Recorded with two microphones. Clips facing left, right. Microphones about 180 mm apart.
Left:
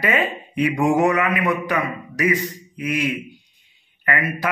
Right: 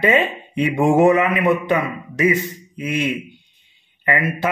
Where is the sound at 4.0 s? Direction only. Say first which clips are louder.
Right 3 dB; 25° right (ahead or behind).